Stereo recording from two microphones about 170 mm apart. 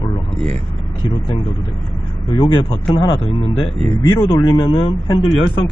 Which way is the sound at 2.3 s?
30° left (ahead or behind).